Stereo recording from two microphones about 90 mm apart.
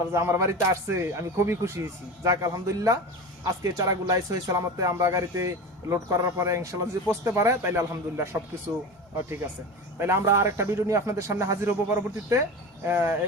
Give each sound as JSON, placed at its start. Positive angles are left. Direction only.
{"t": 0.1, "sound": "speech", "side_deg": -30}
{"t": 10.0, "sound": "speech", "side_deg": -30}